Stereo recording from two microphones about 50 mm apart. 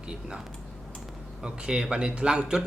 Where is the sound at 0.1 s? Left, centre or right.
Centre.